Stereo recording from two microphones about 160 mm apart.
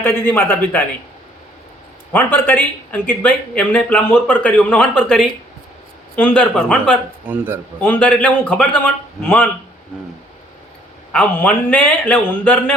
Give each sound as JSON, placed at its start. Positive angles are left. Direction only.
{"t": 0.0, "sound": "speech", "side_deg": 15}
{"t": 2.1, "sound": "speech", "side_deg": 10}
{"t": 7.3, "sound": "speech", "side_deg": -10}
{"t": 7.8, "sound": "speech", "side_deg": 10}
{"t": 11.1, "sound": "speech", "side_deg": 10}